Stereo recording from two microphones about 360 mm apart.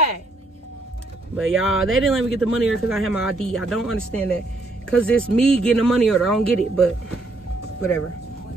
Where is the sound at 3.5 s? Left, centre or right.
Centre.